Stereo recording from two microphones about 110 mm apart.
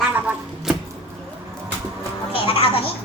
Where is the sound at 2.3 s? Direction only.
60° left (ahead or behind).